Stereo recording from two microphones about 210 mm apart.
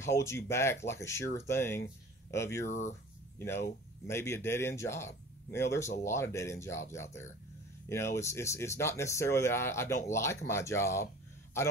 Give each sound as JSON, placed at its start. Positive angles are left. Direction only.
{"t": 0.0, "sound": "speech", "side_deg": 15}
{"t": 2.7, "sound": "speech", "side_deg": 35}
{"t": 3.3, "sound": "speech", "side_deg": 10}